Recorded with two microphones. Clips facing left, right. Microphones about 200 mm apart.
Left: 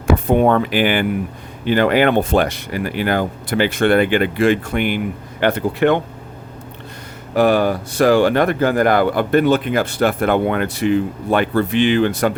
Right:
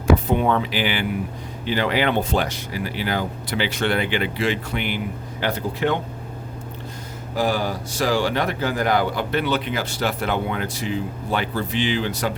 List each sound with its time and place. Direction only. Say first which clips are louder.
0.3 s speech: left 6 dB; 50° left (ahead or behind)
7.3 s speech: left 8 dB; 65° left (ahead or behind)